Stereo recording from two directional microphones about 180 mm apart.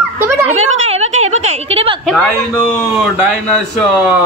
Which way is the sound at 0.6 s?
90° right.